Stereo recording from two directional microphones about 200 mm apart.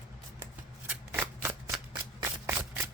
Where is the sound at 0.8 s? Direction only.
10° right (ahead or behind).